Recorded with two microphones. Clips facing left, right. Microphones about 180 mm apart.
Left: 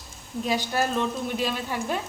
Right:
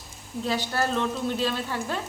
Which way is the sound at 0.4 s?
15° left (ahead or behind).